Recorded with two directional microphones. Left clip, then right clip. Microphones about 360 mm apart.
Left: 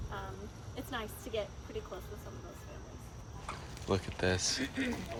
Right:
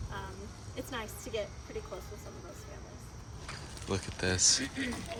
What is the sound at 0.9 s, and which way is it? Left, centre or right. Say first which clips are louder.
Speech: even; centre.